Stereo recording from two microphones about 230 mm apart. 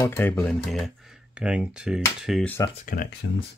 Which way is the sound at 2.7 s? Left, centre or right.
Left.